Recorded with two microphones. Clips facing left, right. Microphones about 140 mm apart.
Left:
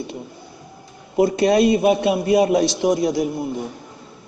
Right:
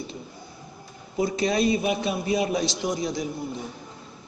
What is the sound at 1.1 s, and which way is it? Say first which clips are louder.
A man's voice: left 8 dB; 65° left (ahead or behind).